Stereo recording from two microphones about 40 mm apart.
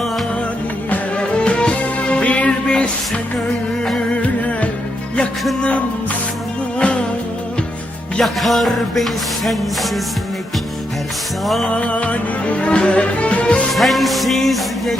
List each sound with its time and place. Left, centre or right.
1.1 s music: left
2.5 s music: left
6.7 s music: left
8.2 s music: centre
11.8 s music: left
13.7 s music: centre